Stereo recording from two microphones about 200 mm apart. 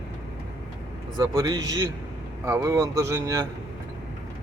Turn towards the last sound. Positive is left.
turn(degrees=-15)  # may be behind; listen again after turning